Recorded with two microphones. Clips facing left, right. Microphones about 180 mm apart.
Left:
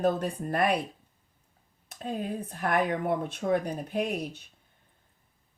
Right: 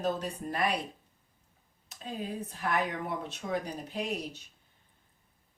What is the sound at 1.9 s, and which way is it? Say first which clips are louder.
Speech: left 5 dB; 55° left (ahead or behind).